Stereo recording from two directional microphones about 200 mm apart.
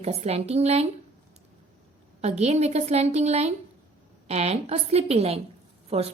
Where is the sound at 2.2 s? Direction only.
35° right (ahead or behind).